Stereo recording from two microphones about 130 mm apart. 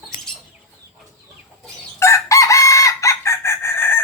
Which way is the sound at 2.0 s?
25° left (ahead or behind).